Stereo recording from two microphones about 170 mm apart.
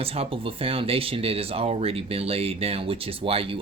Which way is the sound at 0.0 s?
35° right (ahead or behind).